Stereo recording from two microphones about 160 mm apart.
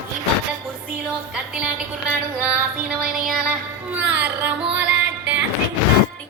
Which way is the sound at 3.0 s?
5° right (ahead or behind).